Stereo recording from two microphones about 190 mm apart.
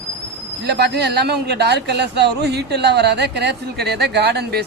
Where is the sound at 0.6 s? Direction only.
60° right (ahead or behind).